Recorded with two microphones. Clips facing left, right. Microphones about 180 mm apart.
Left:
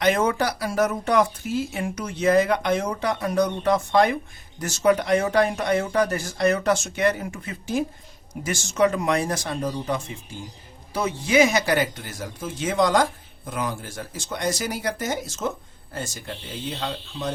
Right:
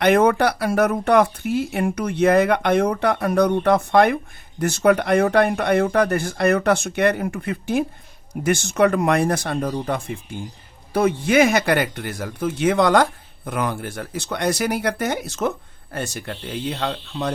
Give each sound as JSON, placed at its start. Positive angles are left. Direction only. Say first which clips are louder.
{"t": 0.0, "sound": "speech", "louder": "right 5 dB", "side_deg": -60}